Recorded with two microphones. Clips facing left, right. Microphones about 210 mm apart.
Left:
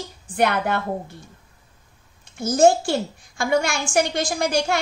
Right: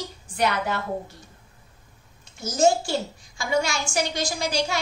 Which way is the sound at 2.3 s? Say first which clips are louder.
Left 5 dB; 55° left (ahead or behind).